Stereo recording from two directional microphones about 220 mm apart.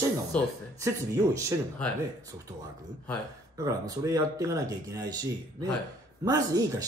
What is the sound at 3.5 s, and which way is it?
Speech, 15° right (ahead or behind).